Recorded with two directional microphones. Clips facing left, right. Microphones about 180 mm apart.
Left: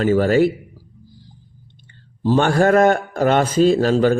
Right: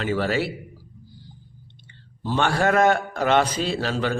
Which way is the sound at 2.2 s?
40° left (ahead or behind).